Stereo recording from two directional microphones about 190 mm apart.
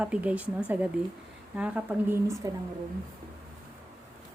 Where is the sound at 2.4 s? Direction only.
20° right (ahead or behind).